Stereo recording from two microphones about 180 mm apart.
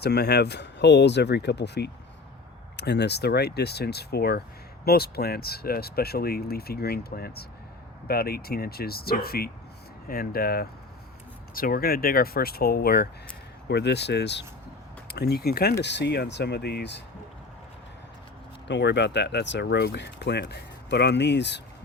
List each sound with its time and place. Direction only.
0.0 s speech: 65° left (ahead or behind)
13.7 s speech: 70° left (ahead or behind)
15.8 s speech: 75° left (ahead or behind)
18.7 s speech: 75° left (ahead or behind)